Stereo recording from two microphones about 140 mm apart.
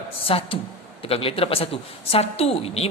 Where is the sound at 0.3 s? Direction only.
40° left (ahead or behind).